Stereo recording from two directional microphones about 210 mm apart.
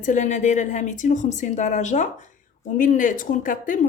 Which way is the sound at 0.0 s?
35° left (ahead or behind).